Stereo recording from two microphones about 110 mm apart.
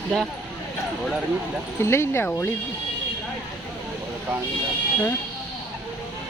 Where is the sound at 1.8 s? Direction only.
25° left (ahead or behind).